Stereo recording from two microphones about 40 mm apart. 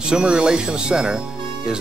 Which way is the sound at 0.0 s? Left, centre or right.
Right.